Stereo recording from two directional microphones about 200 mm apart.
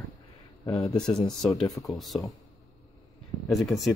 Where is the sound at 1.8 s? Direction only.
Centre (ahead or behind).